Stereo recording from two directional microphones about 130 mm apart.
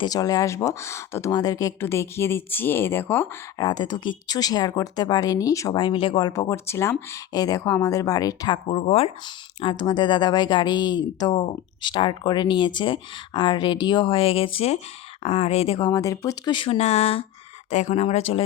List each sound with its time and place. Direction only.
0.0 s speech: 30° left (ahead or behind)
3.6 s speech: 35° left (ahead or behind)
8.7 s speech: 45° left (ahead or behind)
15.9 s speech: 25° left (ahead or behind); by 17.2 s 50° left (ahead or behind)
17.7 s speech: 65° left (ahead or behind); by 18.4 s 50° left (ahead or behind)